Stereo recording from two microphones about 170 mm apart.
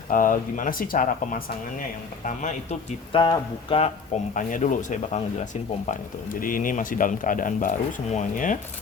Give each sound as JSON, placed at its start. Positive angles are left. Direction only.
{"t": 0.1, "sound": "speech", "side_deg": 50}
{"t": 3.1, "sound": "speech", "side_deg": 30}
{"t": 4.4, "sound": "speech", "side_deg": 50}
{"t": 6.4, "sound": "speech", "side_deg": 55}